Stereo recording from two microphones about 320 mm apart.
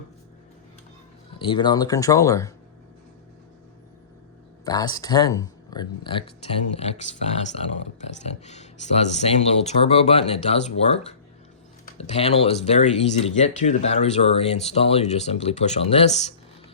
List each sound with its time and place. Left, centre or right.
1.4 s speech: centre
4.6 s speech: centre